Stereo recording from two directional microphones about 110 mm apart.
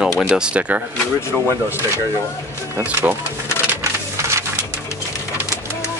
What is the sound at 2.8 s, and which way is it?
Speech, 20° right (ahead or behind).